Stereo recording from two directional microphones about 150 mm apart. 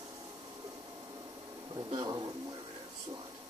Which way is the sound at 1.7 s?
25° right (ahead or behind).